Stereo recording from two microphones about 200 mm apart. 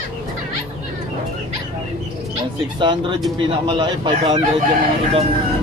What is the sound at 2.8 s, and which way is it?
Speech, 25° right (ahead or behind).